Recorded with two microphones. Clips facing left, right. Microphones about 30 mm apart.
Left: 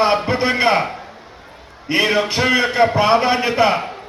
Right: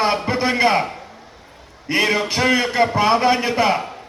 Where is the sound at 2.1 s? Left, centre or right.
Left.